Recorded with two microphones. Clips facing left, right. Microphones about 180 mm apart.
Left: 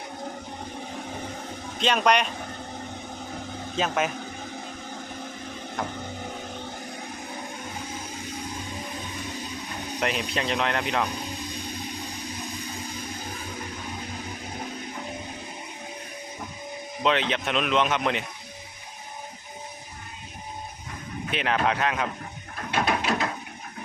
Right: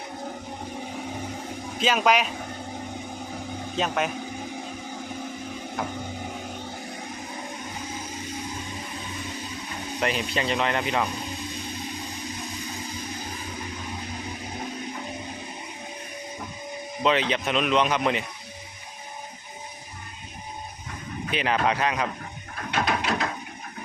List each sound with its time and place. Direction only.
1.8 s speech: 5° right (ahead or behind)
3.8 s speech: centre (ahead or behind)
10.0 s speech: centre (ahead or behind)
17.0 s speech: centre (ahead or behind)
21.2 s speech: centre (ahead or behind)
22.7 s a sound: 5° left (ahead or behind)